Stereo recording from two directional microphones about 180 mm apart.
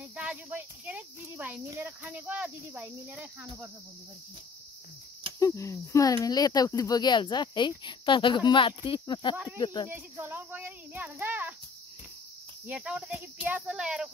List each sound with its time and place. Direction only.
0.1 s speech: 5° right (ahead or behind)
5.4 s speech: 15° left (ahead or behind)
9.8 s speech: 15° right (ahead or behind)
12.6 s speech: 5° right (ahead or behind)